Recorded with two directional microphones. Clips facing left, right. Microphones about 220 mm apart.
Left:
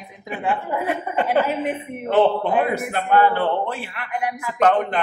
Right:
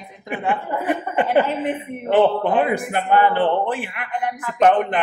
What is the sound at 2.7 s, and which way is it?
Speech, 15° right (ahead or behind).